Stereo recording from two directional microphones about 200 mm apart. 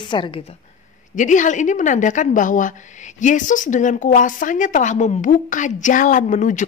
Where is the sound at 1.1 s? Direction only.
40° left (ahead or behind).